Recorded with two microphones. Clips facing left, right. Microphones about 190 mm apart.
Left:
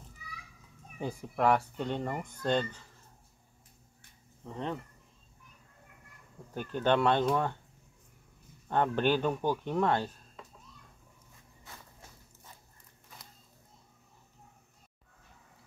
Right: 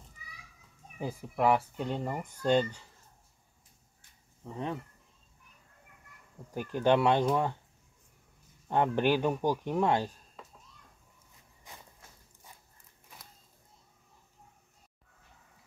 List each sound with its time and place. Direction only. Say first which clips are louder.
0.9 s speech: even; 5° right (ahead or behind)
4.4 s speech: right 1 dB; 10° right (ahead or behind)
6.5 s speech: right 2 dB; 10° right (ahead or behind)
8.6 s speech: right 1 dB; 15° right (ahead or behind)
11.7 s walk: even; 15° right (ahead or behind)